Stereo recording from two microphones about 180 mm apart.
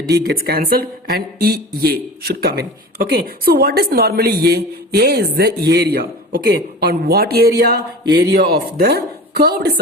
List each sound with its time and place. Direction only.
0.1 s speech: 60° right (ahead or behind)